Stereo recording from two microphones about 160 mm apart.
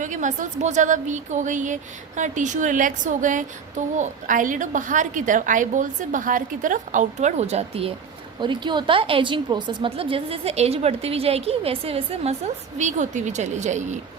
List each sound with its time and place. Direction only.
0.0 s a woman's voice: 50° right (ahead or behind)